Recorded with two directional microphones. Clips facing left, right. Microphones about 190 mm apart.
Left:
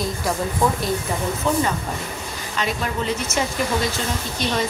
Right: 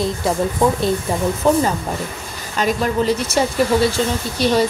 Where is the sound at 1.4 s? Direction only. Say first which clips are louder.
Right 5 dB; 40° right (ahead or behind).